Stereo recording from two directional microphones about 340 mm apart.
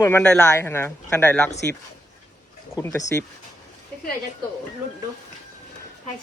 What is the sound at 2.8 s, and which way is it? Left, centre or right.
Speech, centre.